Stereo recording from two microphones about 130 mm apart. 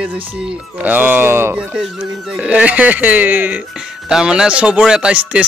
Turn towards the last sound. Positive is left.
turn(degrees=-10)  # may be behind; listen again after turning